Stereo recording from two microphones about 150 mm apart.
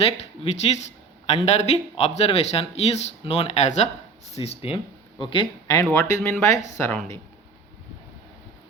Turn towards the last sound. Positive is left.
turn(degrees=15)  # may be behind; listen again after turning